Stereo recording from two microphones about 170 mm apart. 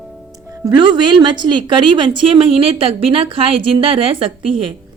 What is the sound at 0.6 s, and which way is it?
A woman's voice, 25° right (ahead or behind).